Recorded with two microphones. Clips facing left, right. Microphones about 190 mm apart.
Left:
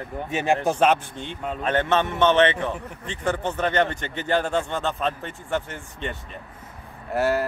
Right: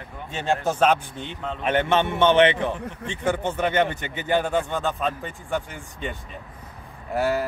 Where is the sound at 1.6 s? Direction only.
10° right (ahead or behind).